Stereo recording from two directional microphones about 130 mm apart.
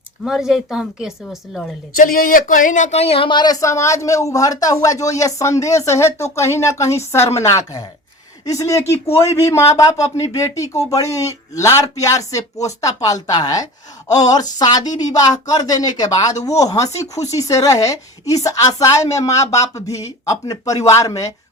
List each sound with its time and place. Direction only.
0.3 s a woman's voice: 5° right (ahead or behind)
2.0 s speech: 90° left; by 21.2 s 25° left (ahead or behind)